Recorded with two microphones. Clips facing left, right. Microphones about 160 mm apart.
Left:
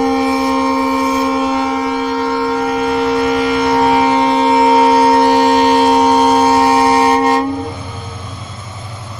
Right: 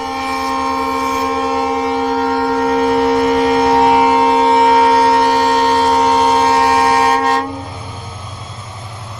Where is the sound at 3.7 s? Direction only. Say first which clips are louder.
Left 1 dB; 20° right (ahead or behind).